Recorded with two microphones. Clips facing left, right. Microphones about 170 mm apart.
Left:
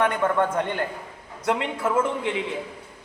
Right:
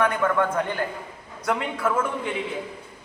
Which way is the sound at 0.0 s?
25° left (ahead or behind).